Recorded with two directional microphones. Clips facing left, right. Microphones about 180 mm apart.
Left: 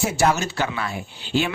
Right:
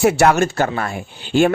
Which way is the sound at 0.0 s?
65° right (ahead or behind).